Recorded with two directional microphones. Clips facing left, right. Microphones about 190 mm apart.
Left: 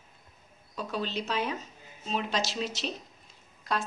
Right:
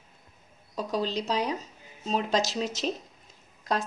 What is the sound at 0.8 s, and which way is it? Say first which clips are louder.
A woman's voice: right 4 dB; 35° right (ahead or behind).